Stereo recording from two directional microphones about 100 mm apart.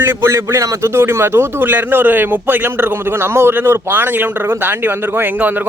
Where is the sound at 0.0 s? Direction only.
25° right (ahead or behind).